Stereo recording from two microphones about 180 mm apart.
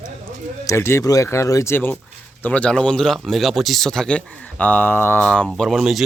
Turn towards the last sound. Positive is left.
turn(degrees=0)  # may be behind; listen again after turning